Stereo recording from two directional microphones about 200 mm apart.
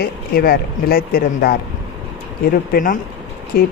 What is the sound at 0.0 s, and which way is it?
A woman's voice, 50° left (ahead or behind).